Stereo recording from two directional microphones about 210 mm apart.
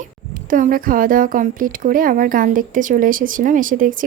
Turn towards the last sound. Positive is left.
turn(degrees=-40)  # may be behind; listen again after turning